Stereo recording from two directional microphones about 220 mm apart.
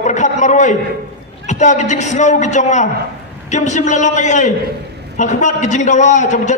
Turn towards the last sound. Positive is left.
turn(degrees=35)  # may be behind; listen again after turning